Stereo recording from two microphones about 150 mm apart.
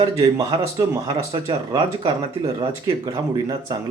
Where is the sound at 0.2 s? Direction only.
25° right (ahead or behind).